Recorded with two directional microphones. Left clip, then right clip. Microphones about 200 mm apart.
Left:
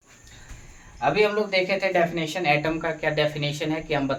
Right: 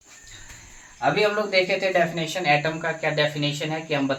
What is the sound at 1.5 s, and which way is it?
Speech, 30° left (ahead or behind).